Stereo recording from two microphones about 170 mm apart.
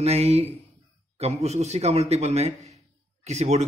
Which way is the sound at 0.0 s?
40° right (ahead or behind).